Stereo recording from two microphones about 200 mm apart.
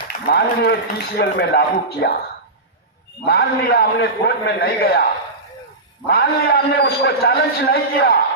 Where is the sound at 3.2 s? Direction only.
55° left (ahead or behind).